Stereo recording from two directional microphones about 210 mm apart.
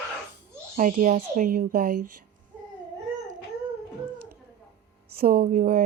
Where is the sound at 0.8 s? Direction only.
40° right (ahead or behind).